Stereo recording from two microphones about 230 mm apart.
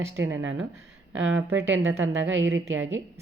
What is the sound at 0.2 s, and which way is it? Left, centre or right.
A woman's voice, right.